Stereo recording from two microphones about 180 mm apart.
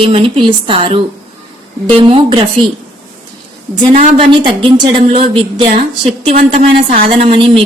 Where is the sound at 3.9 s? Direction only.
50° right (ahead or behind).